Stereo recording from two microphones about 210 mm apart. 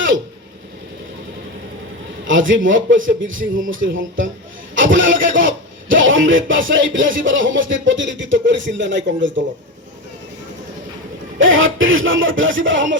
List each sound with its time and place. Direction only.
2.2 s a man's voice: 65° right (ahead or behind)
11.3 s speech: 70° right (ahead or behind)